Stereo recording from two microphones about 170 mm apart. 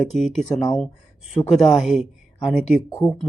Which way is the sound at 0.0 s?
Centre (ahead or behind).